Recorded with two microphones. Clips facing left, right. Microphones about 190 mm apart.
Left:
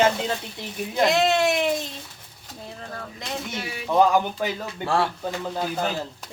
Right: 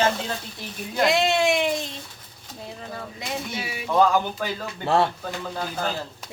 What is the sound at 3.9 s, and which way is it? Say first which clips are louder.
Speech: left 1 dB; 15° left (ahead or behind).